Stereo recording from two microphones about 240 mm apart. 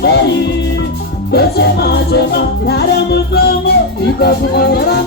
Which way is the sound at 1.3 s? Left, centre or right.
Left.